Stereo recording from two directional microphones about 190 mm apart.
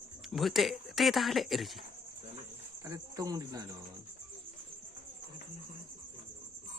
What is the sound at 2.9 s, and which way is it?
Speech, 20° right (ahead or behind).